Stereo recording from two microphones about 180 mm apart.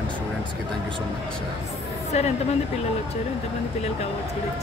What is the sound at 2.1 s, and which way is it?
Speech, 40° left (ahead or behind).